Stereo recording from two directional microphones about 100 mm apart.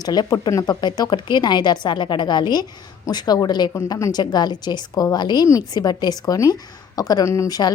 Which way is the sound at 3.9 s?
30° left (ahead or behind).